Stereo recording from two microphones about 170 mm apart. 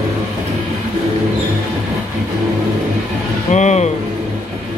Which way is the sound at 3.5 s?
45° left (ahead or behind).